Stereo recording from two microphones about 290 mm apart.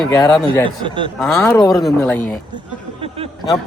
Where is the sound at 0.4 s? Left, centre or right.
Centre.